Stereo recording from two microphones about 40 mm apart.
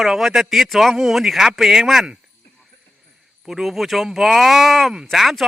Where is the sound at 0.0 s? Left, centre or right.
Centre.